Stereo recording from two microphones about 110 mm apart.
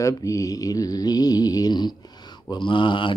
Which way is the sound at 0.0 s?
30° left (ahead or behind).